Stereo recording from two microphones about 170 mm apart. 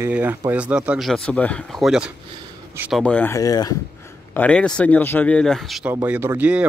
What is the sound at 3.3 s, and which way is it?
Speech, 20° left (ahead or behind).